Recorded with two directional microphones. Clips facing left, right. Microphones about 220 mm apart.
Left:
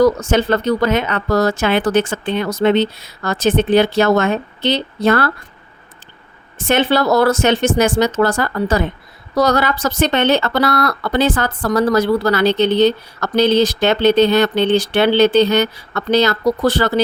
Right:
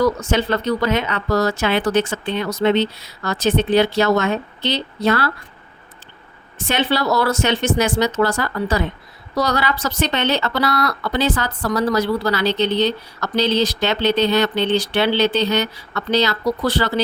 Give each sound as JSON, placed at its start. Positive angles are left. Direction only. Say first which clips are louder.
{"t": 0.0, "sound": "speech", "louder": "left 5 dB", "side_deg": 45}
{"t": 6.6, "sound": "speech", "louder": "left 5 dB", "side_deg": 50}